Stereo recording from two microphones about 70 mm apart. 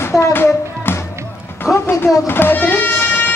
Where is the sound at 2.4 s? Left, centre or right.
Left.